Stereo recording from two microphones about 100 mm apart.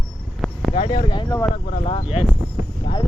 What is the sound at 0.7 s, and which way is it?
Speech, 75° left (ahead or behind).